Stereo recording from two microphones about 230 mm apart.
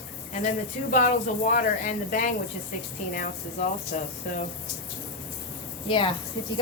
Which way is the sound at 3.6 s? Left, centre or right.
Left.